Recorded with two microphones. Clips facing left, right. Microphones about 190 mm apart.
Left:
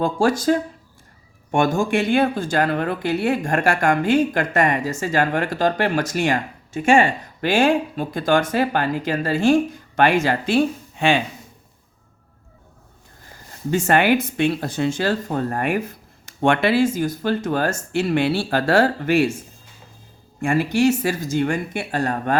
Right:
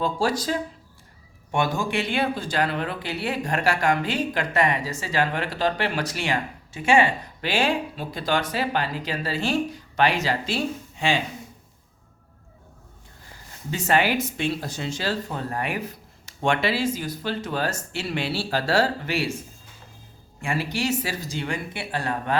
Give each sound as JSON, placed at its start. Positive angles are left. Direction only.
{"t": 0.0, "sound": "speech", "side_deg": 50}
{"t": 13.7, "sound": "speech", "side_deg": 50}
{"t": 20.4, "sound": "speech", "side_deg": 50}